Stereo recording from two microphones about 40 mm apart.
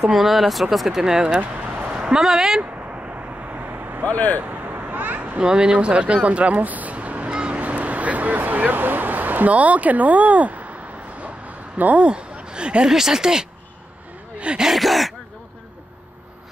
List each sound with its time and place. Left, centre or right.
0.0 s speech: centre
1.8 s a sound: right
3.5 s vehicle: right
4.0 s speech: left
4.5 s children playing: right
5.4 s speech: right
7.2 s a sound: right
7.6 s speech: right
11.1 s a sound: right
12.0 s speech: right
12.8 s speech: centre
14.5 s speech: right
14.8 s speech: centre